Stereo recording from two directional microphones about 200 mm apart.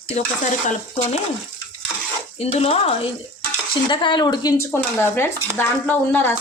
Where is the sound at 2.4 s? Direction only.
30° left (ahead or behind); by 6.3 s 10° left (ahead or behind).